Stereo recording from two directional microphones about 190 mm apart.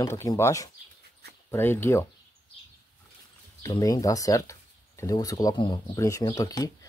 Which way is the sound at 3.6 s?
20° left (ahead or behind).